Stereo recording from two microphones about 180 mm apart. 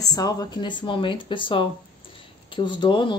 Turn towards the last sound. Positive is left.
turn(degrees=25)  # may be behind; listen again after turning